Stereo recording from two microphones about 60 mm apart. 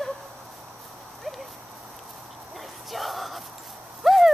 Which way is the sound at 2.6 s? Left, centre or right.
Centre.